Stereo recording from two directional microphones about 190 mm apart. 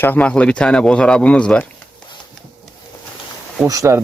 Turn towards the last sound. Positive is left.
turn(degrees=-15)  # may be behind; listen again after turning